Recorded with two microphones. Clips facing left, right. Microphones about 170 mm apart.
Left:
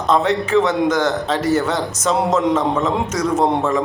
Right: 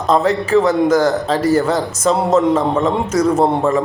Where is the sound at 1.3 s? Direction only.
30° right (ahead or behind).